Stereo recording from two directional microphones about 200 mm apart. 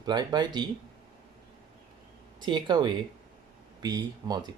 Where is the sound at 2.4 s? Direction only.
20° right (ahead or behind).